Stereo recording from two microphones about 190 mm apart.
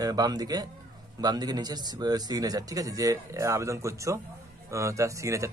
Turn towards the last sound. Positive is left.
turn(degrees=-15)  # may be behind; listen again after turning